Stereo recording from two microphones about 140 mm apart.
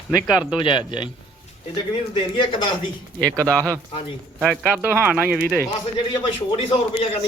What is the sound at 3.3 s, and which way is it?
Speech, 25° right (ahead or behind).